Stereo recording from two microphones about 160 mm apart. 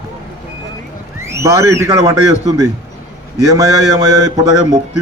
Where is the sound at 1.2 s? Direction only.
15° right (ahead or behind).